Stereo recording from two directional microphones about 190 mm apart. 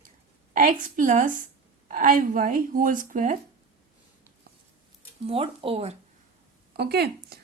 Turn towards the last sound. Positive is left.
turn(degrees=-55)  # may be behind; listen again after turning